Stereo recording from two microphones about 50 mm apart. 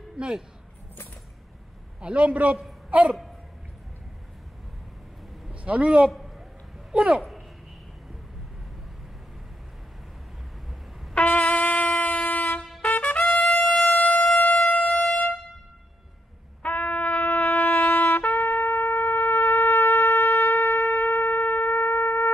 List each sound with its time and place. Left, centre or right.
2.0 s a man's voice: right
5.5 s a man's voice: right
6.1 s a sound: centre
6.9 s speech: centre
11.2 s trumpet: left
13.8 s siren: left
16.6 s trumpet: left